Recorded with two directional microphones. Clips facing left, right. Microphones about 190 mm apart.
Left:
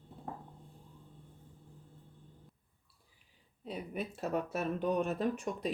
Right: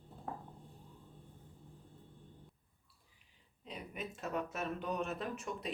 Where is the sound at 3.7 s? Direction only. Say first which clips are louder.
Left 6 dB; 35° left (ahead or behind).